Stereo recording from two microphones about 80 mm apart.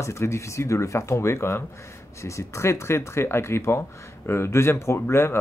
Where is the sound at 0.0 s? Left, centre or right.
Left.